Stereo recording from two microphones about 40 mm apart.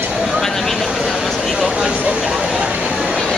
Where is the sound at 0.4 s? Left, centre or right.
Centre.